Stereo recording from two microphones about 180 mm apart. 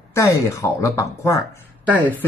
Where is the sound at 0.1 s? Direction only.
15° left (ahead or behind).